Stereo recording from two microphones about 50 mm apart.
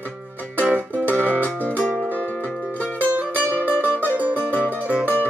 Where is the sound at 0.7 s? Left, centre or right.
Right.